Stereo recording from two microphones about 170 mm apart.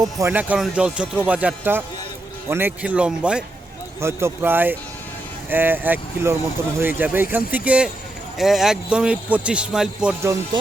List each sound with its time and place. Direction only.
0.0 s a man's voice: 15° right (ahead or behind)
10.5 s speech: 25° right (ahead or behind)